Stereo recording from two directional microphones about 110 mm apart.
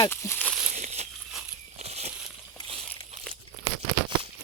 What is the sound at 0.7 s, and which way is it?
Crumpling, 90° right.